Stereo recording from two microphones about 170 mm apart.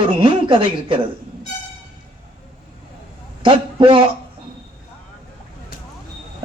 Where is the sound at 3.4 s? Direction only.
30° right (ahead or behind).